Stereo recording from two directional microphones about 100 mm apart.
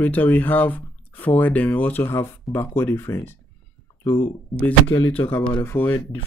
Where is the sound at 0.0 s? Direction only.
15° left (ahead or behind).